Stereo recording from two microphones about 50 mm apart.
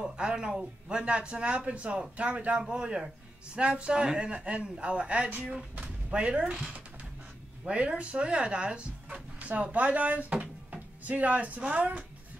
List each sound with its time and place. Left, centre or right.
0.0 s speech: centre
7.6 s speech: right